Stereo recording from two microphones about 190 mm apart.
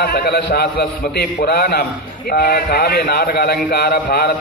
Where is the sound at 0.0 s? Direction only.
55° left (ahead or behind).